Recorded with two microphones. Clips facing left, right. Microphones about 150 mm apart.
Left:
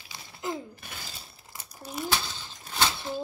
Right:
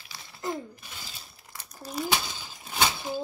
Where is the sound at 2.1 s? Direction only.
10° right (ahead or behind).